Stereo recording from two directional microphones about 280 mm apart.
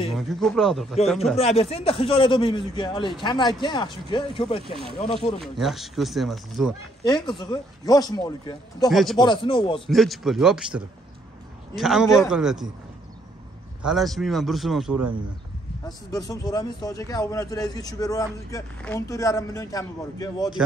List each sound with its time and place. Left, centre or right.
0.1 s speech: centre
1.3 s a man's voice: left
5.4 s speech: centre
7.1 s a man's voice: centre
8.9 s speech: centre
9.2 s a man's voice: centre
9.8 s speech: centre
13.8 s speech: centre
16.1 s a man's voice: centre